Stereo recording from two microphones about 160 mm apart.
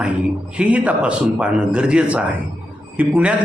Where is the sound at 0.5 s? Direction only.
10° right (ahead or behind).